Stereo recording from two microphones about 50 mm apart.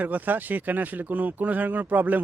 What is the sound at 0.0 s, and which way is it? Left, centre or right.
Speech, right.